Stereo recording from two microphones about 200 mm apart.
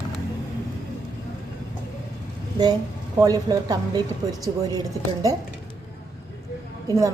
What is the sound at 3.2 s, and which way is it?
Speech, 20° right (ahead or behind).